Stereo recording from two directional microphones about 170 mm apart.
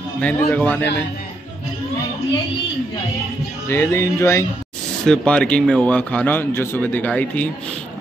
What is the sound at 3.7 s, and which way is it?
Speech, 15° left (ahead or behind).